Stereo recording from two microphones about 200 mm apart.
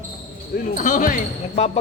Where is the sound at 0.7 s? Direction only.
40° left (ahead or behind).